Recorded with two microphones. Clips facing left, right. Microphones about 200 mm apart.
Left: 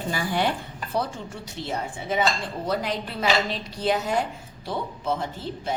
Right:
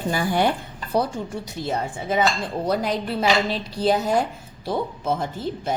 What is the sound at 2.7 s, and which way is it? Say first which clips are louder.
A woman's voice: right 4 dB; 40° right (ahead or behind).